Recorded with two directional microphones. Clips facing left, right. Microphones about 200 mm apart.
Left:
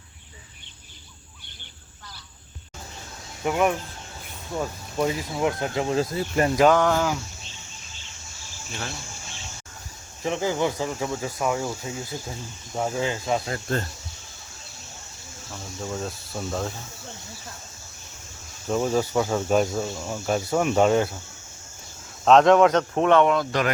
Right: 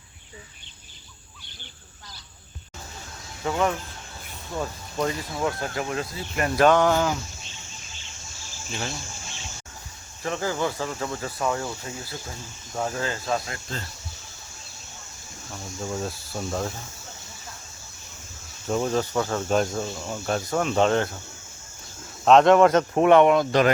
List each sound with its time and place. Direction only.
3.4 s speech: 15° left (ahead or behind)
6.6 s speech: 5° left (ahead or behind)
10.2 s speech: 15° left (ahead or behind)
13.7 s speech: 55° left (ahead or behind)
15.5 s speech: centre (ahead or behind)
18.7 s speech: 5° left (ahead or behind)
22.2 s speech: centre (ahead or behind); by 23.7 s 25° right (ahead or behind)